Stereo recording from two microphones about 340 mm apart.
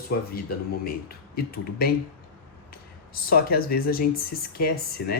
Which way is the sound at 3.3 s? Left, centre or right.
Left.